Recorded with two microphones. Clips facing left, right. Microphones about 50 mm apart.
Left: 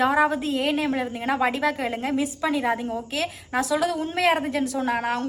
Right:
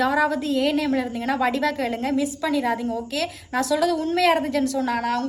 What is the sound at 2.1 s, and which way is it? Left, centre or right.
A woman's voice, left.